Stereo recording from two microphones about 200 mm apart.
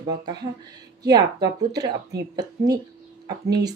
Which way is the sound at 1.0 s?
20° right (ahead or behind).